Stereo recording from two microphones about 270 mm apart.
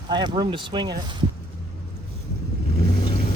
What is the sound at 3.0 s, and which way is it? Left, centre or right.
Vehicle, left.